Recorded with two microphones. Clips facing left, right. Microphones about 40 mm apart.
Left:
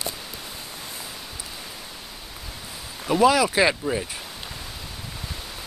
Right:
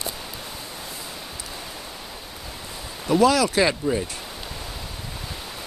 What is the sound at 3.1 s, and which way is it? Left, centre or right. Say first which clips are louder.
Speech: even; centre.